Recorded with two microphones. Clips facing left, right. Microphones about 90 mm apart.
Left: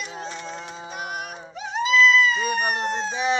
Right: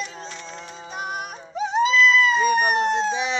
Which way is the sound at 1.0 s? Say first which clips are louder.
Right 3 dB; 35° right (ahead or behind).